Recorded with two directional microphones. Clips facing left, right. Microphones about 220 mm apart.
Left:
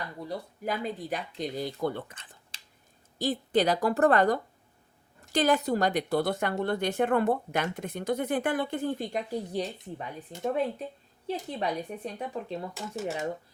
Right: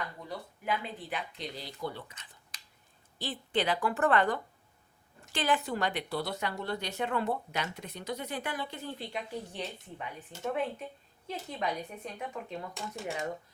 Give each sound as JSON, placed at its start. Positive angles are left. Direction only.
{"t": 0.3, "sound": "speech", "side_deg": 40}
{"t": 2.5, "sound": "finger snapping", "side_deg": 30}
{"t": 3.2, "sound": "a woman's voice", "side_deg": 40}
{"t": 12.7, "sound": "speech", "side_deg": 5}